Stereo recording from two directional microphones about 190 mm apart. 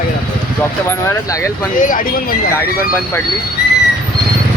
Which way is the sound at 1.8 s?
45° left (ahead or behind).